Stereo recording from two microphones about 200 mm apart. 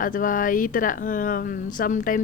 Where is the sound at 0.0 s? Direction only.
40° left (ahead or behind).